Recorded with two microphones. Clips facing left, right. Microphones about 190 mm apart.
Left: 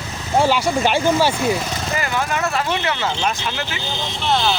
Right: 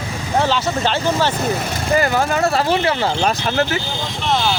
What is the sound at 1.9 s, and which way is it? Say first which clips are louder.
Speech: right 6 dB; 40° right (ahead or behind).